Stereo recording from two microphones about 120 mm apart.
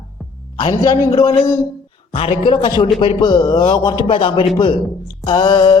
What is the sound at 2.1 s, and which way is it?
A man's voice, 55° left (ahead or behind).